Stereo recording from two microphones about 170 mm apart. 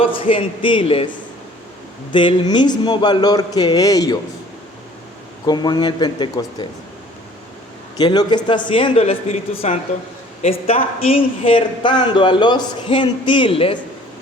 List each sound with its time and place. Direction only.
0.0 s speech: 30° left (ahead or behind)
2.1 s speech: 25° left (ahead or behind)
5.5 s speech: 25° left (ahead or behind)
7.9 s speech: 25° left (ahead or behind)